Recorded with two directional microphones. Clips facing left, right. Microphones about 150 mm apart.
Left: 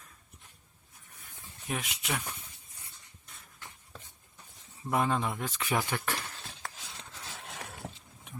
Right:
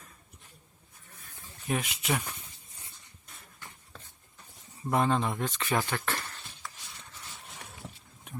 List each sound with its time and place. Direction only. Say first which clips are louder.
1.6 s speech: right 5 dB; centre (ahead or behind)
4.8 s speech: right 2 dB; 5° left (ahead or behind)
6.7 s a sound: left 2 dB; 90° left